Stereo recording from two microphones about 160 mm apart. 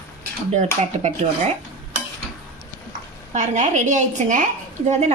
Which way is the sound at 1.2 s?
45° right (ahead or behind).